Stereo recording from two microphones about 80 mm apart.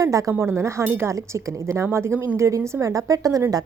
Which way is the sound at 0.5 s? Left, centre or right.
Right.